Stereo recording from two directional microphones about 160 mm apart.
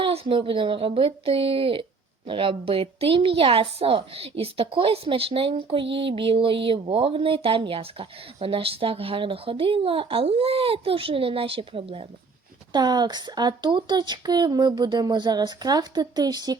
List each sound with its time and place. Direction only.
0.0 s speech: 35° right (ahead or behind)